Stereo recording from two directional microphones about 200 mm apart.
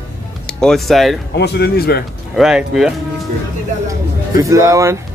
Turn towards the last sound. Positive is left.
turn(degrees=-15)  # may be behind; listen again after turning